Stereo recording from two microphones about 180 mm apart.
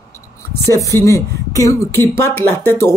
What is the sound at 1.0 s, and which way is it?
Speech, 15° left (ahead or behind).